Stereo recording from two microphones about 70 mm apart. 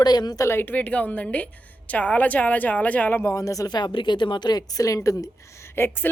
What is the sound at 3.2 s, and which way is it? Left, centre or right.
Speech, left.